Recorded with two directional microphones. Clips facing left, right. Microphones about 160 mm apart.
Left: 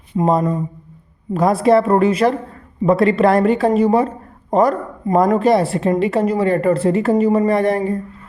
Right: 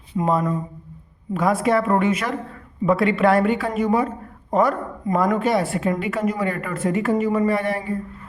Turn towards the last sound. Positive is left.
turn(degrees=40)  # may be behind; listen again after turning